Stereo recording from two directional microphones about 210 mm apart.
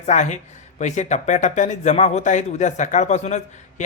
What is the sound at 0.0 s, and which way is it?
Speech, 35° left (ahead or behind).